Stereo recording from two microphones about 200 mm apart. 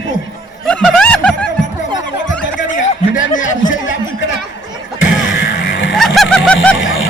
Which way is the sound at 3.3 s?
40° left (ahead or behind).